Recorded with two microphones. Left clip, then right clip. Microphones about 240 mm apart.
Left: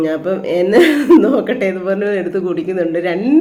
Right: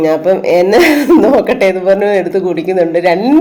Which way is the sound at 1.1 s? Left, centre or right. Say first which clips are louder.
Right 3 dB; centre.